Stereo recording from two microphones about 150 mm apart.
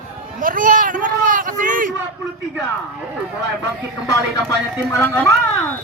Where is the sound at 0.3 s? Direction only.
65° right (ahead or behind).